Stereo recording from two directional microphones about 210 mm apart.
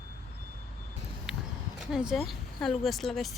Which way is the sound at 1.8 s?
Centre (ahead or behind).